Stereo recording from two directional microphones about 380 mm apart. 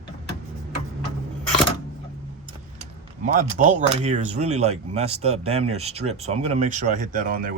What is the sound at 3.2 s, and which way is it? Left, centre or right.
Speech, centre.